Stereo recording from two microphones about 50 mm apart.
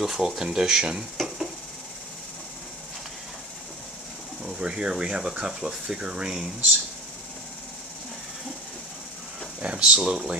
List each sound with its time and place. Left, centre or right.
0.0 s speech: centre
1.1 s a sound: centre
4.5 s speech: centre
9.6 s speech: right